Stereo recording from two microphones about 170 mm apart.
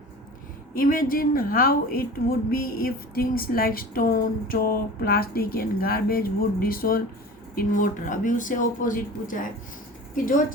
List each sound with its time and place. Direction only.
0.7 s a woman's voice: 55° left (ahead or behind)